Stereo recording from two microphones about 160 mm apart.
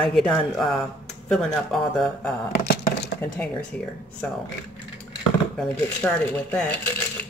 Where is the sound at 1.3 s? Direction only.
Centre (ahead or behind).